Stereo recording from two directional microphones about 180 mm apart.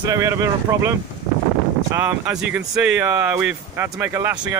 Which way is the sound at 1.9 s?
10° right (ahead or behind).